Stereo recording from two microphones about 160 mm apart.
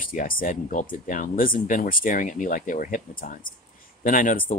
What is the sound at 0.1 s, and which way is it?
Speech, 60° left (ahead or behind).